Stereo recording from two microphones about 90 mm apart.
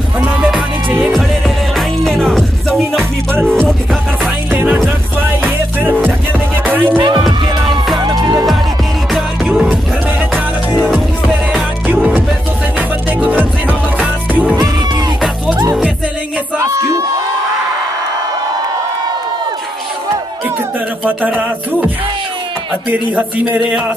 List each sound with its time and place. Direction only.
0.2 s music: 10° right (ahead or behind)
1.8 s music: 5° left (ahead or behind)
4.5 s music: 25° right (ahead or behind)
8.2 s music: 50° right (ahead or behind)
9.1 s music: centre (ahead or behind)
12.7 s music: 20° right (ahead or behind)
16.5 s music: 35° right (ahead or behind)
21.0 s a sound: 20° right (ahead or behind)
22.8 s speech: 15° right (ahead or behind)